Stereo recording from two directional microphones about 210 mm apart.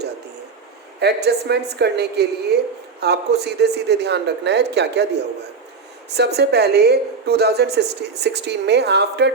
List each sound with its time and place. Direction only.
0.9 s a woman's voice: 50° right (ahead or behind)